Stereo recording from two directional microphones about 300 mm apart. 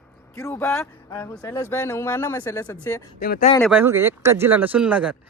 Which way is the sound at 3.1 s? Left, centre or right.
Left.